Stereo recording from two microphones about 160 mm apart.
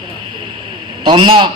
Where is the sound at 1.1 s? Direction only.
35° right (ahead or behind).